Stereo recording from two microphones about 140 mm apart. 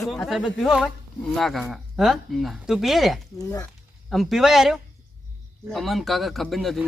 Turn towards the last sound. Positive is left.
turn(degrees=0)  # may be behind; listen again after turning